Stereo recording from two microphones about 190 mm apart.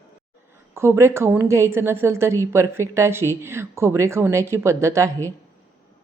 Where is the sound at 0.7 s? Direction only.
15° right (ahead or behind).